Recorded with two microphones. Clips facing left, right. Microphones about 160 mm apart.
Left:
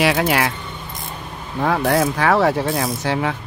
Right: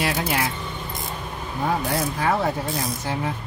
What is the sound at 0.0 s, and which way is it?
Speech, 75° left (ahead or behind).